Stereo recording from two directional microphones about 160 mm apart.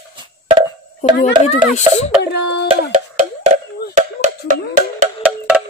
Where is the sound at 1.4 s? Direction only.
45° left (ahead or behind).